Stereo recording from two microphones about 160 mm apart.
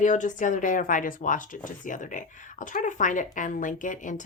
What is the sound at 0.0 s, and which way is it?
Speech, 50° left (ahead or behind).